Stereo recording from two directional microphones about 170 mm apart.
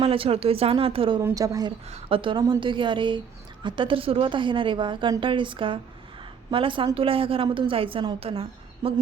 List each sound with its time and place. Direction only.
0.0 s a woman's voice: 35° right (ahead or behind)
1.2 s a woman's voice: 20° right (ahead or behind)
1.9 s a woman's voice: 30° right (ahead or behind)